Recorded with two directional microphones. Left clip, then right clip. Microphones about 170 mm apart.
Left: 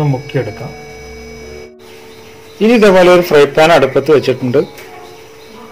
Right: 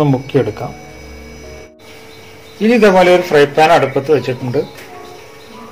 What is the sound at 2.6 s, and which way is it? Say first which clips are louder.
A man's voice: left 2 dB; 35° left (ahead or behind).